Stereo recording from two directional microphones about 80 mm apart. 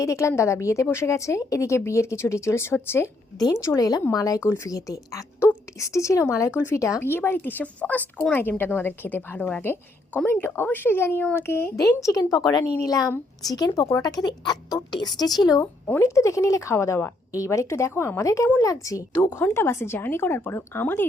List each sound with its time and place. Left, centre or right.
0.0 s a woman's voice: left
3.3 s a woman's voice: left
7.0 s speech: left
11.8 s a woman's voice: left
15.6 s a woman's voice: left